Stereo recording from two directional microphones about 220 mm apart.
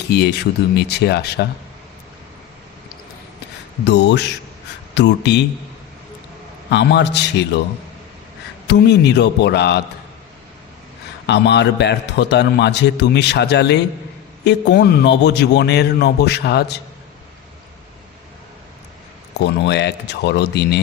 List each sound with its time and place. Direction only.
0.1 s a man's voice: 50° left (ahead or behind)
3.8 s a man's voice: 50° left (ahead or behind)
6.7 s a man's voice: 50° left (ahead or behind)
8.6 s a man's voice: 50° left (ahead or behind)
11.3 s a man's voice: 50° left (ahead or behind)
19.4 s a man's voice: 50° left (ahead or behind)